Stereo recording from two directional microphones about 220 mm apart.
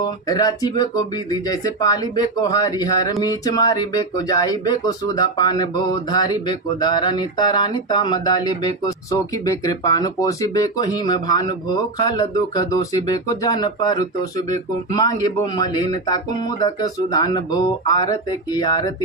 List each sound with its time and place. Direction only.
0.3 s speech: 15° left (ahead or behind)